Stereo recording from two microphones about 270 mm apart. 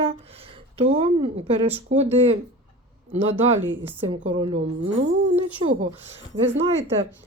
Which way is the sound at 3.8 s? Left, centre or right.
Centre.